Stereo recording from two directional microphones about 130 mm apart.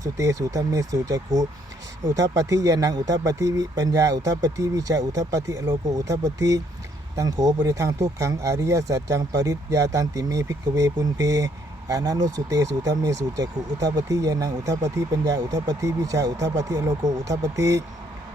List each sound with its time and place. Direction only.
0.0 s speech: 25° right (ahead or behind)